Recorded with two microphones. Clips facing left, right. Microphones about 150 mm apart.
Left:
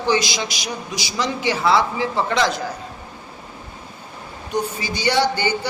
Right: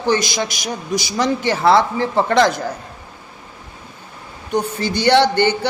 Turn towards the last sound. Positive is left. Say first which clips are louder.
# right 5 dB
turn(degrees=-60)  # may be behind; listen again after turning